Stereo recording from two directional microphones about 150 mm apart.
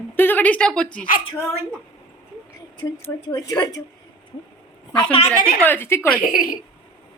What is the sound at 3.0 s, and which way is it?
Speech, 20° left (ahead or behind).